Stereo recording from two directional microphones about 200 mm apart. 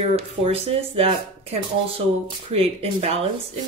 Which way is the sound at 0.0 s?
30° right (ahead or behind).